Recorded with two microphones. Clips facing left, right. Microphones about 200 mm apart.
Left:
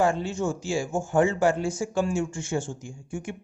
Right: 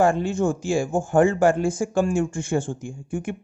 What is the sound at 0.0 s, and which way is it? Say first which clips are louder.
Speech: right 4 dB; 55° right (ahead or behind).